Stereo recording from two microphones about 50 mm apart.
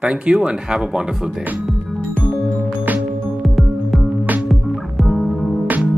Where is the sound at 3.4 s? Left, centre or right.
Centre.